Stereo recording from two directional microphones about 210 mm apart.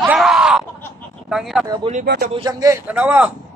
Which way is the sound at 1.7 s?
30° right (ahead or behind).